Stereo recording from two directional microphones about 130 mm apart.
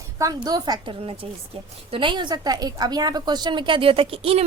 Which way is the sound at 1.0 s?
45° right (ahead or behind).